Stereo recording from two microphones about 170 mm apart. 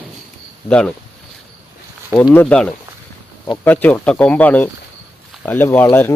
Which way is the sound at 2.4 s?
5° left (ahead or behind).